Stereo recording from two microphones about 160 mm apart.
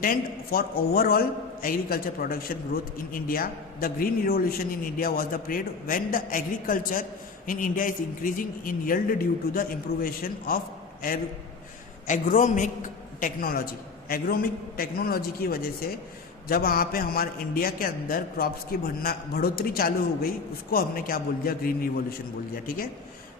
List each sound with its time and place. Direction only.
0.0 s a man's voice: 65° left (ahead or behind)